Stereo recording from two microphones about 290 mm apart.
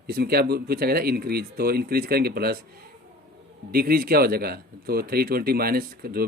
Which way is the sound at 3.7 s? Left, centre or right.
Right.